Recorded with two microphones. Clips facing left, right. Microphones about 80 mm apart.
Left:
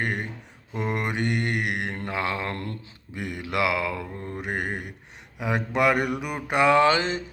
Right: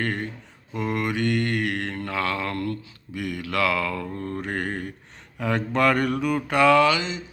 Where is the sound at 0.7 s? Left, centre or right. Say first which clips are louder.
Right 2 dB; left.